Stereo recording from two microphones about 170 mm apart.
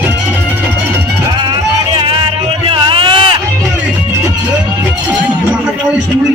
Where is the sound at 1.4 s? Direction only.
25° right (ahead or behind).